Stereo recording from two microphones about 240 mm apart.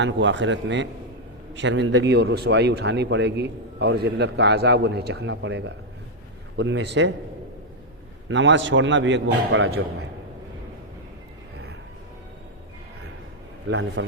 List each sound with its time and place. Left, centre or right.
0.0 s speech: right
8.3 s speech: right
13.7 s speech: right